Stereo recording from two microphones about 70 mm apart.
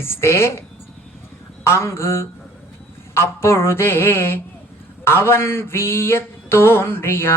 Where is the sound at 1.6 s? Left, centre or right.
Left.